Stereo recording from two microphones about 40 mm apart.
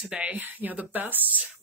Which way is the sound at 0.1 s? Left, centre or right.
Right.